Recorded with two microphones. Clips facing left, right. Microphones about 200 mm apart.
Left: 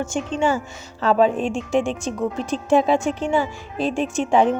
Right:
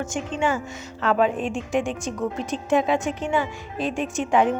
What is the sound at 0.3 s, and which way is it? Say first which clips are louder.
A woman's voice: left 3 dB; 30° left (ahead or behind).